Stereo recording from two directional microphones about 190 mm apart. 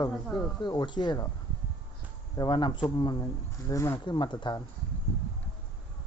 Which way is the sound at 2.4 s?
25° left (ahead or behind).